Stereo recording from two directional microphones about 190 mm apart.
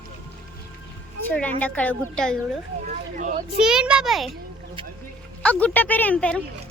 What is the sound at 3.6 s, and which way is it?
Speech, 5° right (ahead or behind).